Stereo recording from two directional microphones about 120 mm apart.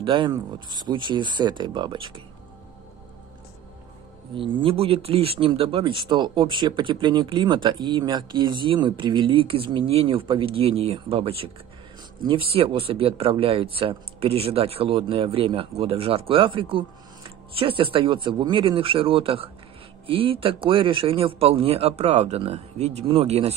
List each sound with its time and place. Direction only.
0.0 s speech: 40° right (ahead or behind)
4.4 s speech: 45° right (ahead or behind)